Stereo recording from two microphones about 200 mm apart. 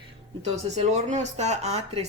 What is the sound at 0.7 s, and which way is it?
Speech, 35° right (ahead or behind).